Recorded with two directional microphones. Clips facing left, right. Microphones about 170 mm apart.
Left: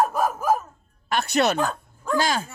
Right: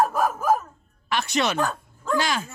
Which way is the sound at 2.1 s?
40° left (ahead or behind).